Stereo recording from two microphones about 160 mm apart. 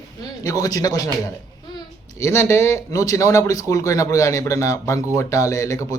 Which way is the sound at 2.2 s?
15° left (ahead or behind).